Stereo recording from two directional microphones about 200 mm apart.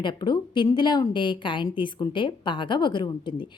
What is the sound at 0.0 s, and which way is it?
A woman's voice, 20° left (ahead or behind).